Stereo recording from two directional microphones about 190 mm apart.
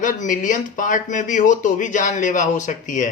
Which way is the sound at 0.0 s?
45° left (ahead or behind).